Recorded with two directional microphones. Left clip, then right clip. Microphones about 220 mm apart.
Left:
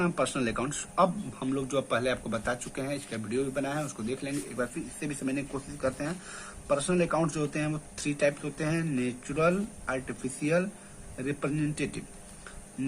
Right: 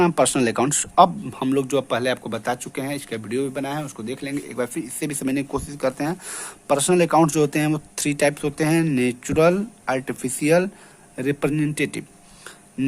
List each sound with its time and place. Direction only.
0.0 s speech: 50° right (ahead or behind)